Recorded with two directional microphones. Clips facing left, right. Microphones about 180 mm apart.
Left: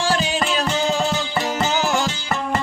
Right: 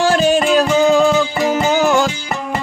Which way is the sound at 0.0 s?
50° right (ahead or behind).